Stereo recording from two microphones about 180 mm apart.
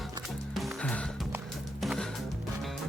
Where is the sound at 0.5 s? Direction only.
5° left (ahead or behind).